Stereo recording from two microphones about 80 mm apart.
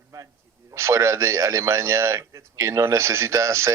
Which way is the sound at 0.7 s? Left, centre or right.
Right.